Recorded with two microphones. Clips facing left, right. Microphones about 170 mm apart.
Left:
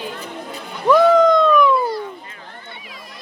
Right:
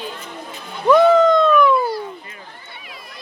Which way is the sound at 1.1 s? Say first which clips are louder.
Even; 15° left (ahead or behind).